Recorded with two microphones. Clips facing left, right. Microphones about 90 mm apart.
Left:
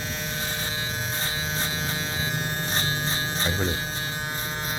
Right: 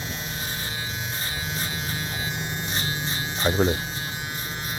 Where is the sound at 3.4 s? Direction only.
35° right (ahead or behind).